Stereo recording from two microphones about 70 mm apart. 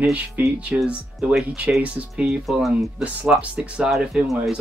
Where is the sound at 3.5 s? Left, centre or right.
Centre.